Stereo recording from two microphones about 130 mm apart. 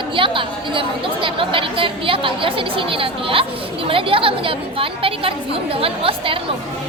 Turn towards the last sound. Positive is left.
turn(degrees=-45)  # may be behind; listen again after turning